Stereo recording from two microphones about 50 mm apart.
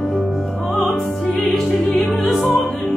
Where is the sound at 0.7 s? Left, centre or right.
Centre.